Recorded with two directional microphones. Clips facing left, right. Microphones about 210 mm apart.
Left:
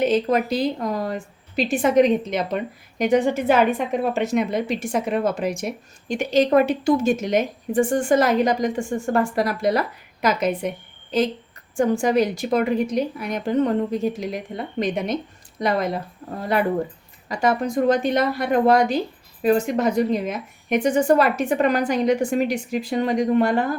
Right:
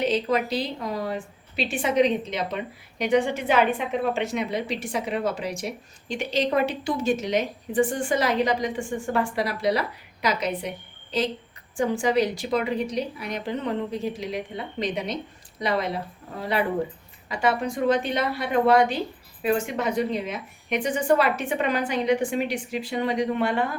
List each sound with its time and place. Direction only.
0.0 s speech: 50° left (ahead or behind)
11.8 s speech: 45° left (ahead or behind)